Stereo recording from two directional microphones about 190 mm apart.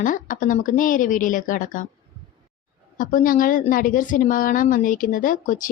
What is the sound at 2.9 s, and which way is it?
A woman's voice, 45° left (ahead or behind).